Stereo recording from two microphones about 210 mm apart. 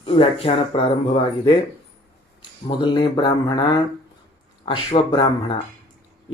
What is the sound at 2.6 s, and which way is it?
Speech, 20° left (ahead or behind).